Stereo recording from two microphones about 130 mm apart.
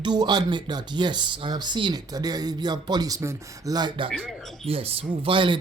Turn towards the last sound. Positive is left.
turn(degrees=-40)  # may be behind; listen again after turning